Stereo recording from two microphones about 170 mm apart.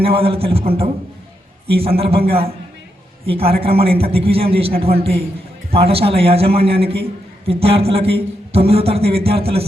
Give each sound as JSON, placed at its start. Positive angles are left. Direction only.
{"t": 0.0, "sound": "a man's voice", "side_deg": -35}